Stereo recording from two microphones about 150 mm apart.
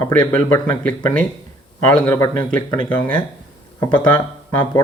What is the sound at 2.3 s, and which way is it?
Speech, 10° left (ahead or behind).